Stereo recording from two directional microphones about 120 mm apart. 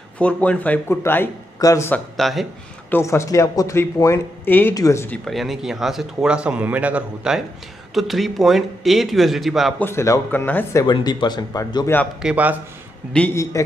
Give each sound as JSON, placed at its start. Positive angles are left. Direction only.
{"t": 0.2, "sound": "speech", "side_deg": 10}
{"t": 2.1, "sound": "speech", "side_deg": 0}
{"t": 2.9, "sound": "speech", "side_deg": 25}
{"t": 5.1, "sound": "speech", "side_deg": 0}
{"t": 9.8, "sound": "speech", "side_deg": 20}
{"t": 10.8, "sound": "speech", "side_deg": 35}
{"t": 11.8, "sound": "speech", "side_deg": 15}
{"t": 12.2, "sound": "a man's voice", "side_deg": -10}
{"t": 13.3, "sound": "speech", "side_deg": 25}